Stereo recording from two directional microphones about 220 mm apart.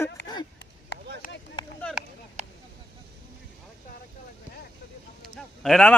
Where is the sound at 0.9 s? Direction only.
50° left (ahead or behind).